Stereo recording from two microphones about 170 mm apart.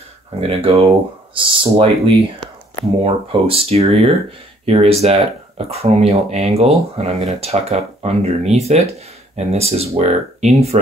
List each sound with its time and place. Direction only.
0.4 s speech: 35° right (ahead or behind)